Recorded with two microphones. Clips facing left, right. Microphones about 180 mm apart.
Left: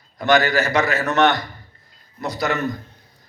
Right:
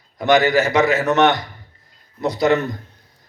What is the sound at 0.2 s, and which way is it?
A man's voice, 20° right (ahead or behind).